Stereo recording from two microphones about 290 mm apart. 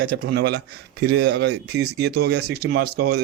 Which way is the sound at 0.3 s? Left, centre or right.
Right.